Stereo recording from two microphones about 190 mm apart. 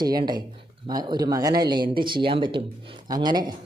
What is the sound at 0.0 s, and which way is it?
Speech, 20° right (ahead or behind).